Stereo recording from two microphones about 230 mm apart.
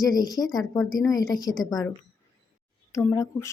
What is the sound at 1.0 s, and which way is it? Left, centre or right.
Speech, centre.